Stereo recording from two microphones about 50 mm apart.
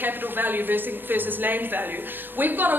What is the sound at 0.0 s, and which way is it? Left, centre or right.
A woman's voice, right.